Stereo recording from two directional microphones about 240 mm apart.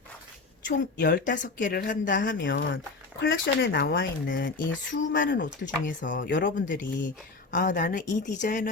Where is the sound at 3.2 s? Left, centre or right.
Left.